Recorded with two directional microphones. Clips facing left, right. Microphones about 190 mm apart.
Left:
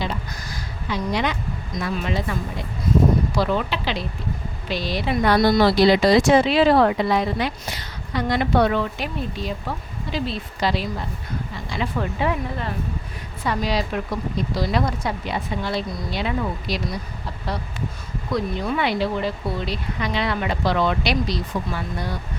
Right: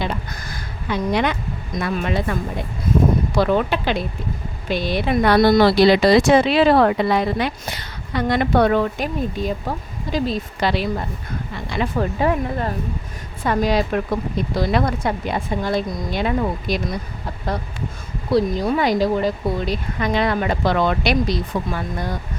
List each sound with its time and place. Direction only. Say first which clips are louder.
0.0 s speech: right 2 dB; 55° right (ahead or behind)
10.6 s speech: right 2 dB; 60° right (ahead or behind)
11.5 s a sound: right 5 dB; 60° right (ahead or behind)
11.9 s speech: right 4 dB; 45° right (ahead or behind)
18.3 s speech: right 6 dB; 35° right (ahead or behind)